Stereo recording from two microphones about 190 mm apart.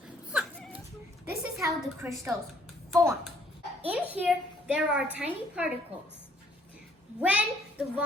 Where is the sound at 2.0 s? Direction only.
10° right (ahead or behind).